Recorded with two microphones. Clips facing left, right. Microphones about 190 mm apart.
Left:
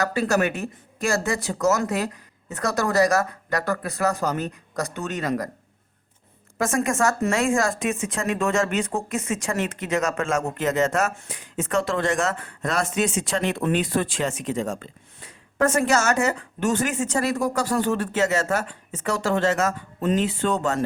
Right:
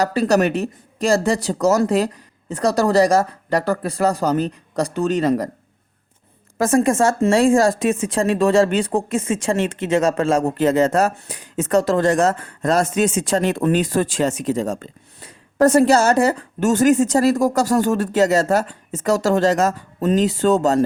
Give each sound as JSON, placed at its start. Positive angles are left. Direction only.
{"t": 0.2, "sound": "speech", "side_deg": -35}
{"t": 6.6, "sound": "speech", "side_deg": -35}